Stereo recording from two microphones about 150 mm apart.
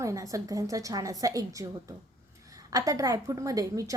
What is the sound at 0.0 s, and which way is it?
A woman's voice, 20° right (ahead or behind).